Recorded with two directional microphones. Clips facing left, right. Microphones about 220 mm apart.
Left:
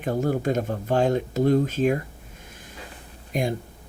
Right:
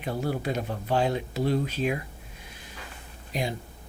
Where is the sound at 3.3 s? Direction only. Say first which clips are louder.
Left 5 dB; 50° left (ahead or behind).